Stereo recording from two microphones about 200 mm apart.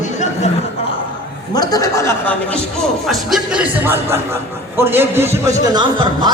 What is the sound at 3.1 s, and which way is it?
A man's voice, centre (ahead or behind).